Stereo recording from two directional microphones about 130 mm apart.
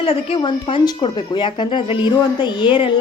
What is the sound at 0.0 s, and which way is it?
Speech, 45° left (ahead or behind).